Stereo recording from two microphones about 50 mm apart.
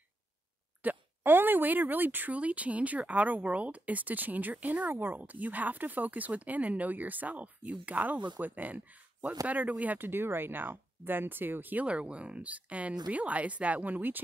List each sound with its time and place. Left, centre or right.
0.8 s speech: right
11.8 s speech: right